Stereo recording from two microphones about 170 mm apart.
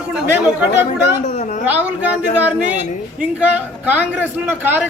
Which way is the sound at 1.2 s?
45° left (ahead or behind).